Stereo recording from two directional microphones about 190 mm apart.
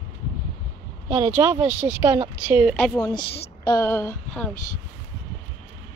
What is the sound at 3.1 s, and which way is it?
Speech, 20° left (ahead or behind).